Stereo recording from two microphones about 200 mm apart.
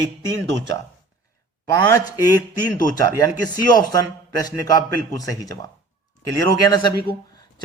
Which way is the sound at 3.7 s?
20° left (ahead or behind).